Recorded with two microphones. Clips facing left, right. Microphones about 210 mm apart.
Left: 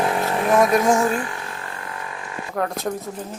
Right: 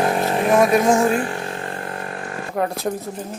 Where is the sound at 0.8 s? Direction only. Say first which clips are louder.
Right 2 dB; 25° right (ahead or behind).